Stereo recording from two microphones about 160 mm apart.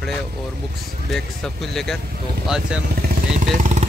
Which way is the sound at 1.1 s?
Centre (ahead or behind).